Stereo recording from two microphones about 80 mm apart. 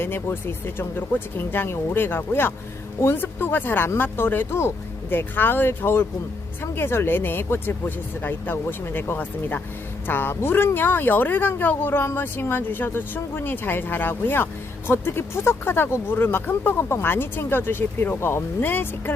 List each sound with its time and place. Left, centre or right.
0.0 s speech: left